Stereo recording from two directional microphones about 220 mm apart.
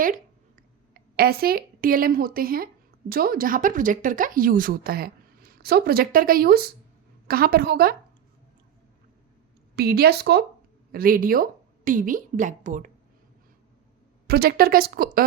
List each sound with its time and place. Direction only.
1.1 s a woman's voice: 45° right (ahead or behind)
9.7 s a woman's voice: 45° right (ahead or behind)
14.3 s a woman's voice: 45° right (ahead or behind)